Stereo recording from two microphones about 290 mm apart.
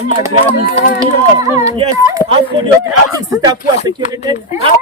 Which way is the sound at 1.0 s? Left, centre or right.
Centre.